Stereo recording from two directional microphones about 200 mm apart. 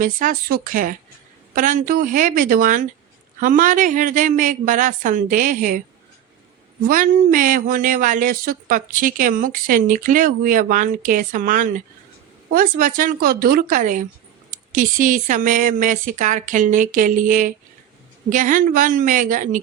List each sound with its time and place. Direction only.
0.0 s speech: 40° right (ahead or behind)
6.8 s speech: 45° right (ahead or behind)